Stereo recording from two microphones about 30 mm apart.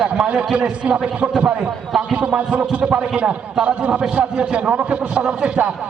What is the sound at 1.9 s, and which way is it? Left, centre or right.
Speech, centre.